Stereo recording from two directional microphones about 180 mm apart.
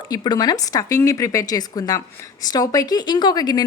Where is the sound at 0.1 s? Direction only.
20° left (ahead or behind).